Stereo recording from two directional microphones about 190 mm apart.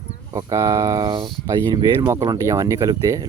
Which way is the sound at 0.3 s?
15° right (ahead or behind).